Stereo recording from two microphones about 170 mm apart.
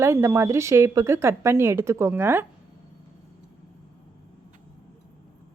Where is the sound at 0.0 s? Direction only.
15° right (ahead or behind).